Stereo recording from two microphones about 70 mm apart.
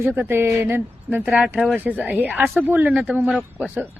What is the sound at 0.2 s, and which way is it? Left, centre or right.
Speech, right.